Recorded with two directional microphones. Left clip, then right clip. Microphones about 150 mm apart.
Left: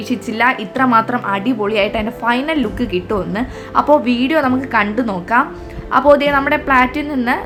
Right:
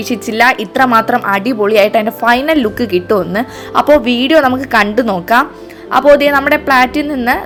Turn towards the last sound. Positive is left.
turn(degrees=-30)  # may be behind; listen again after turning